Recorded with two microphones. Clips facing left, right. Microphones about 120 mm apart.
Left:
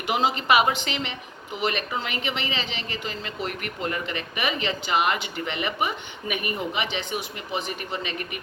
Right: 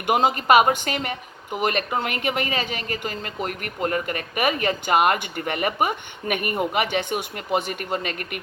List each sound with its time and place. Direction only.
0.1 s speech: 50° right (ahead or behind)